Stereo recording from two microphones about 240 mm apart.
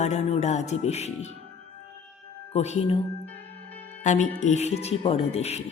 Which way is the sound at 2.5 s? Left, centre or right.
Left.